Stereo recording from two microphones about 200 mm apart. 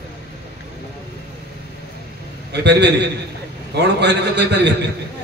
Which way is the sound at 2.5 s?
60° right (ahead or behind).